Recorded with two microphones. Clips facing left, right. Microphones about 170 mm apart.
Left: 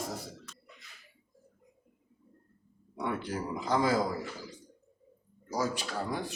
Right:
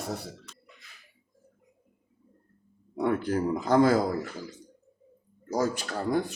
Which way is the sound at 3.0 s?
50° right (ahead or behind).